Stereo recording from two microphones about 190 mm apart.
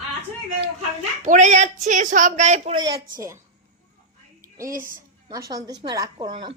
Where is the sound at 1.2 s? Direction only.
40° right (ahead or behind).